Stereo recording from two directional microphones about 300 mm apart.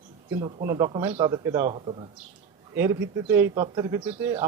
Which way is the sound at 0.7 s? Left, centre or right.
Centre.